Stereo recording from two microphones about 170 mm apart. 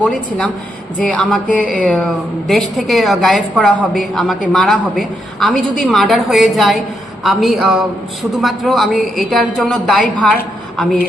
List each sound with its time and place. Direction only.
0.0 s a woman's voice: 5° left (ahead or behind)